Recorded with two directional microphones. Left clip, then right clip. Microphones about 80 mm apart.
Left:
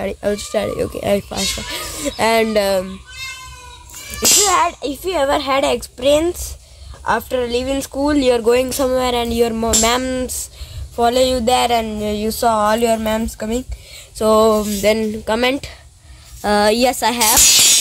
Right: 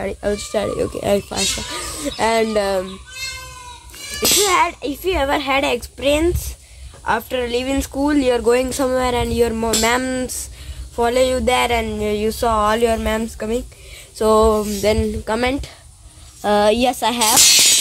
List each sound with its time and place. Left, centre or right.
0.4 s speech: left
2.0 s speech: left
4.2 s a child's voice: centre
4.8 s speech: left; by 8.0 s centre
8.1 s speech: left
8.5 s speech: left
15.0 s speech: left